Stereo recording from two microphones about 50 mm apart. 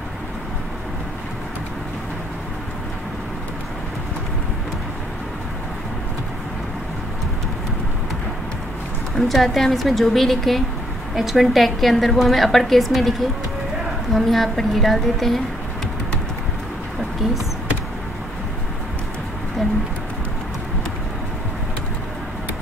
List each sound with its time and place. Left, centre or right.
9.1 s a woman's voice: centre
14.1 s a woman's voice: centre